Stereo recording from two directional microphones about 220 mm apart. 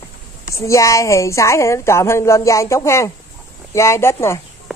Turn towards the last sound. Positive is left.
turn(degrees=10)  # may be behind; listen again after turning